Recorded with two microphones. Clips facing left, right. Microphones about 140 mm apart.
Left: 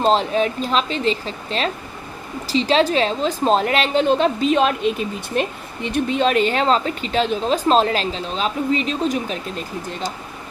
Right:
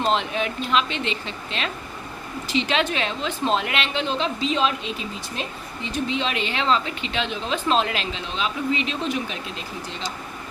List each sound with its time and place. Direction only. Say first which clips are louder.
0.0 s a woman's voice: left 6 dB; 35° left (ahead or behind)